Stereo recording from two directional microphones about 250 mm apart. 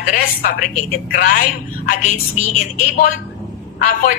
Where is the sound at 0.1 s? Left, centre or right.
Left.